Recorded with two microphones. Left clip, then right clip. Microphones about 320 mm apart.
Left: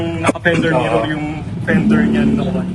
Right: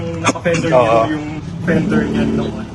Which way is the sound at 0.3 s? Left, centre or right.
Centre.